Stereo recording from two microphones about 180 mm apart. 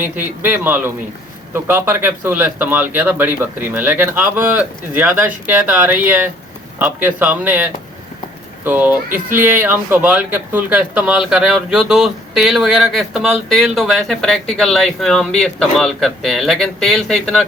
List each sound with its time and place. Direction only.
0.0 s a man's voice: 10° right (ahead or behind)
9.0 s speech: 50° right (ahead or behind)
9.4 s speech: 10° right (ahead or behind)